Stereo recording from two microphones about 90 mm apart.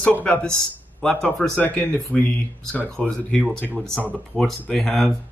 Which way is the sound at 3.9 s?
15° right (ahead or behind).